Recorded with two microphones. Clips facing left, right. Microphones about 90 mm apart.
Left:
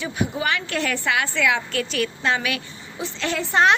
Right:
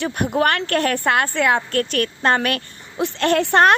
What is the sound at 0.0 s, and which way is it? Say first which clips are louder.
A woman's voice: right 6 dB; 60° right (ahead or behind).